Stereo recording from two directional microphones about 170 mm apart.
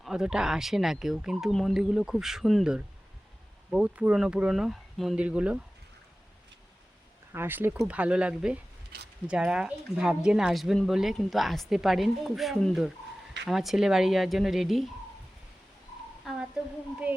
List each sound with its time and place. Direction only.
0.0 s speech: 5° right (ahead or behind)
7.3 s speech: 10° right (ahead or behind)
8.9 s speech: 70° right (ahead or behind)
9.3 s speech: 5° right (ahead or behind)